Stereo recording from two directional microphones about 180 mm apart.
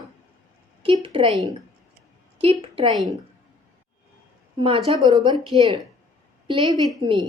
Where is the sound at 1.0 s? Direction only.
30° right (ahead or behind).